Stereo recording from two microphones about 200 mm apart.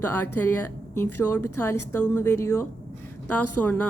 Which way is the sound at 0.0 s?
10° left (ahead or behind).